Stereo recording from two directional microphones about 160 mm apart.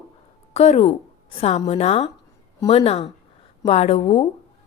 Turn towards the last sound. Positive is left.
turn(degrees=35)  # may be behind; listen again after turning